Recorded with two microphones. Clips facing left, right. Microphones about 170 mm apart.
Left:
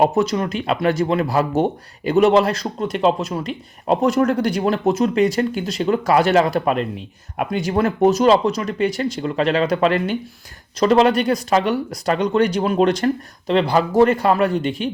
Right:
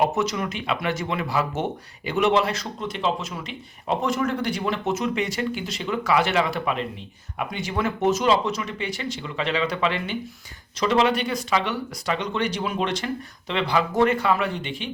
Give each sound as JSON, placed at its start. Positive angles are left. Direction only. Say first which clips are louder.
{"t": 0.0, "sound": "speech", "louder": "left 6 dB", "side_deg": 35}